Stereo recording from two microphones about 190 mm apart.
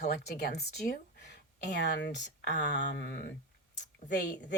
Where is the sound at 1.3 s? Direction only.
65° left (ahead or behind).